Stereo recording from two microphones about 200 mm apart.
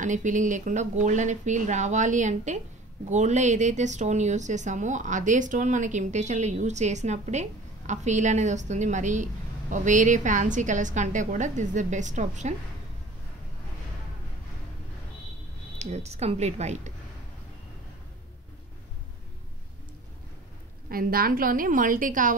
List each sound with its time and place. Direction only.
0.0 s a woman's voice: 40° right (ahead or behind)
15.8 s a woman's voice: 35° right (ahead or behind)
20.9 s a woman's voice: 45° right (ahead or behind)